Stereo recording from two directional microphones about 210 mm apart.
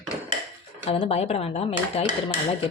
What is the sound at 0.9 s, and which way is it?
Speech, 30° left (ahead or behind).